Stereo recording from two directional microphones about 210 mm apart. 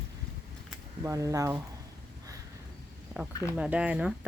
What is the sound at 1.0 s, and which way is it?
Speech, 15° right (ahead or behind).